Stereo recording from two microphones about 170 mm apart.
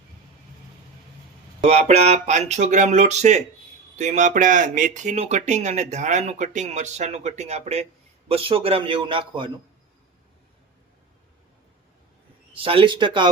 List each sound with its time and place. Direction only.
1.6 s a man's voice: 40° right (ahead or behind)
12.5 s speech: 35° right (ahead or behind)